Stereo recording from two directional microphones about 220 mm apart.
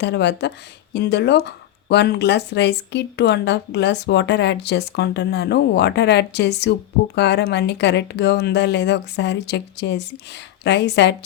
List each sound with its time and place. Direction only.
0.0 s speech: 50° left (ahead or behind)